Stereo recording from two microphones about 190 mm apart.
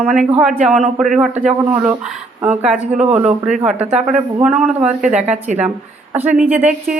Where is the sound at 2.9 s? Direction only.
35° right (ahead or behind).